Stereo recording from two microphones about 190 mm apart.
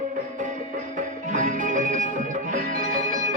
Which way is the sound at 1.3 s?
40° right (ahead or behind).